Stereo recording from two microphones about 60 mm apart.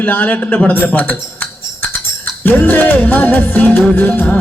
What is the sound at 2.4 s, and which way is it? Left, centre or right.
A man's voice, left.